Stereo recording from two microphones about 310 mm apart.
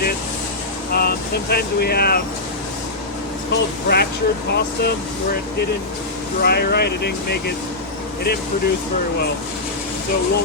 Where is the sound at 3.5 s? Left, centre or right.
Left.